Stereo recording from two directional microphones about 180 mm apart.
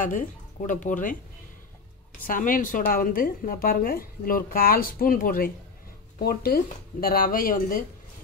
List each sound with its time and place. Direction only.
0.0 s a woman's voice: 45° left (ahead or behind)
2.2 s a woman's voice: 50° left (ahead or behind)